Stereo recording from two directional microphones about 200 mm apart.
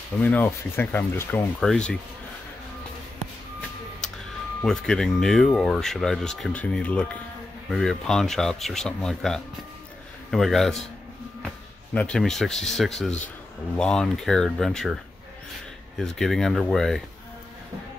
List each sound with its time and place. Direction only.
0.2 s speech: 10° left (ahead or behind)
4.0 s a sound: centre (ahead or behind)
4.6 s speech: 5° left (ahead or behind)
16.0 s speech: centre (ahead or behind)